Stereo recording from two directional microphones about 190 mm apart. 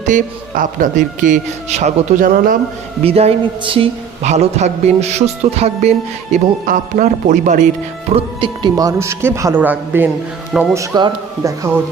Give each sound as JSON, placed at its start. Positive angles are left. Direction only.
{"t": 0.0, "sound": "speech", "side_deg": -40}
{"t": 3.0, "sound": "a man's voice", "side_deg": -30}
{"t": 8.1, "sound": "a man's voice", "side_deg": -25}